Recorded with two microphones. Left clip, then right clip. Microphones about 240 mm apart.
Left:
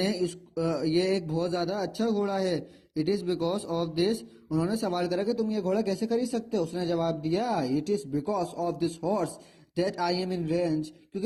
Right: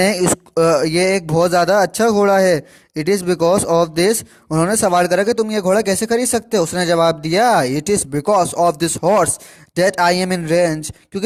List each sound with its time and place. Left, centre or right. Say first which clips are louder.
0.0 s speech: right 14 dB; right